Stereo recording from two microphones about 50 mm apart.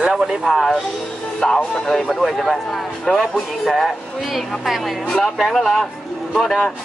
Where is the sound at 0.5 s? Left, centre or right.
Centre.